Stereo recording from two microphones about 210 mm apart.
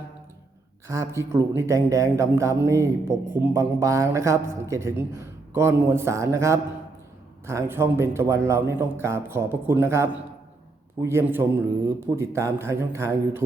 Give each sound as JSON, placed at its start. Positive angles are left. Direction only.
{"t": 0.9, "sound": "a man's voice", "side_deg": -15}